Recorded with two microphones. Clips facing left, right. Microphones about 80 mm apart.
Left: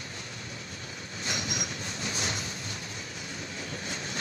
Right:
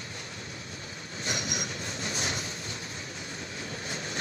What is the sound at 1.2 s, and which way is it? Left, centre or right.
Train, right.